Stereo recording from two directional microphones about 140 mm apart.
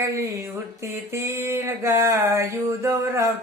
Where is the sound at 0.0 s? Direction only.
20° right (ahead or behind).